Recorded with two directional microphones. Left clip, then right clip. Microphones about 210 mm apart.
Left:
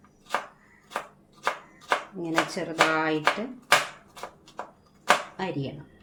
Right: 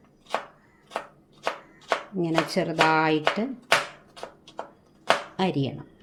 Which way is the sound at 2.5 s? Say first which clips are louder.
Right 4 dB; 45° right (ahead or behind).